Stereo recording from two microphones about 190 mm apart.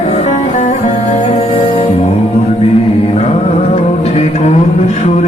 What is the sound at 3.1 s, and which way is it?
Music, 35° left (ahead or behind).